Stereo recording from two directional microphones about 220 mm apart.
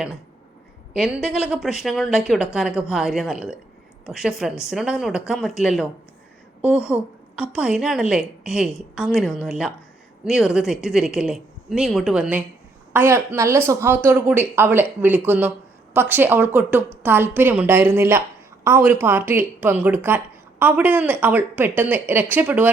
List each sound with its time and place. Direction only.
0.9 s a woman's voice: 5° right (ahead or behind)